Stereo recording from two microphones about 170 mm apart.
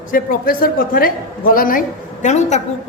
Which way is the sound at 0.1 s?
55° left (ahead or behind).